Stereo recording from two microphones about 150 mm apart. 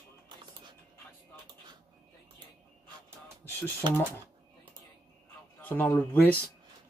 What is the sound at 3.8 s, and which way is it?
Speech, 30° right (ahead or behind).